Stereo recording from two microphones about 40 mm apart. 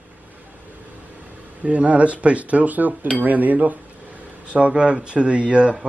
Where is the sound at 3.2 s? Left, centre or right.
Right.